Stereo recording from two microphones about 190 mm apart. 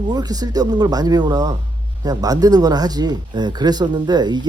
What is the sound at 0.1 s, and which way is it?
Speech, 20° right (ahead or behind).